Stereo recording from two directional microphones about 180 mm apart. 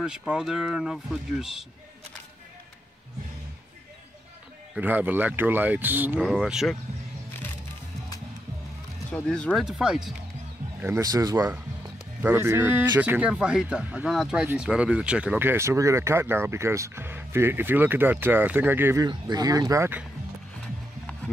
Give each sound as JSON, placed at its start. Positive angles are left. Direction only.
{"t": 0.0, "sound": "speech", "side_deg": -5}
{"t": 4.7, "sound": "speech", "side_deg": -10}
{"t": 9.1, "sound": "speech", "side_deg": 5}
{"t": 10.8, "sound": "speech", "side_deg": -15}
{"t": 19.0, "sound": "speech", "side_deg": -20}